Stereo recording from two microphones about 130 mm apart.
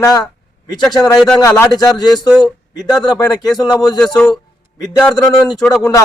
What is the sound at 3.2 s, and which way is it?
Speech, 30° left (ahead or behind).